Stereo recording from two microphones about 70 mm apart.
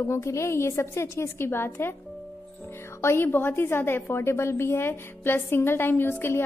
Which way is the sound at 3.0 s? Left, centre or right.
Left.